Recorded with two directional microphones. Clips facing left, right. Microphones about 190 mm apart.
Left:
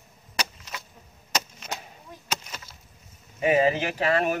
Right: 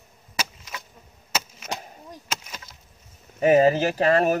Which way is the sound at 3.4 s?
40° right (ahead or behind).